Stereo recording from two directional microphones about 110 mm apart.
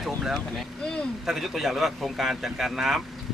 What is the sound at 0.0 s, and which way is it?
Boat, centre (ahead or behind).